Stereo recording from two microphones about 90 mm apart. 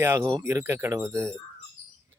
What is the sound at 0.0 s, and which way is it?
Speech, 25° right (ahead or behind).